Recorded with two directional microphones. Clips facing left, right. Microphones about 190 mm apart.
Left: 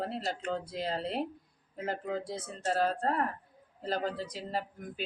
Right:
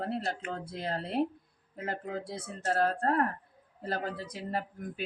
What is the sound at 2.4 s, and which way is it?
A woman's voice, 60° right (ahead or behind).